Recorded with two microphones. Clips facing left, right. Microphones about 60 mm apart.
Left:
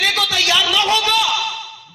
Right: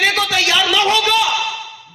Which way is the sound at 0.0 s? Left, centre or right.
Right.